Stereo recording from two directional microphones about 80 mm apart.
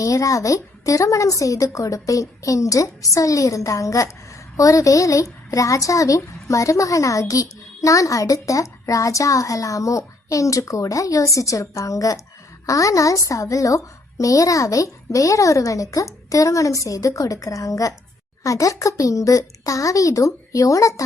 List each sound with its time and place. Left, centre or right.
0.0 s a woman's voice: left